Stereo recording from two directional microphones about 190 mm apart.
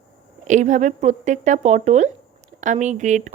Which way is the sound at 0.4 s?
40° right (ahead or behind).